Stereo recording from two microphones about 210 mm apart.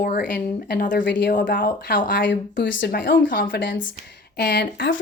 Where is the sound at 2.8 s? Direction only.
45° left (ahead or behind).